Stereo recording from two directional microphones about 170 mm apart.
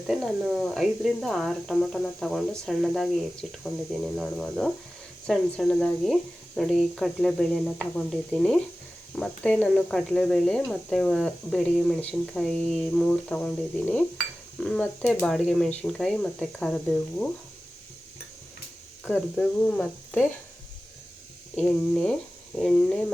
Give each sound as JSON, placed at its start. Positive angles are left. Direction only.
{"t": 0.1, "sound": "speech", "side_deg": 0}
{"t": 19.1, "sound": "speech", "side_deg": 5}
{"t": 21.5, "sound": "speech", "side_deg": 5}